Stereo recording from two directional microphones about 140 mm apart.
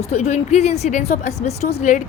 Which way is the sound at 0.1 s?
55° left (ahead or behind).